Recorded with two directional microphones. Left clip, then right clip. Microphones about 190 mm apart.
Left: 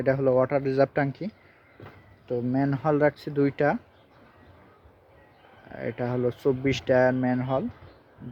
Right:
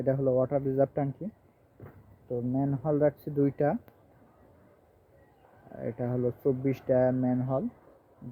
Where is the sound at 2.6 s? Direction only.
30° left (ahead or behind).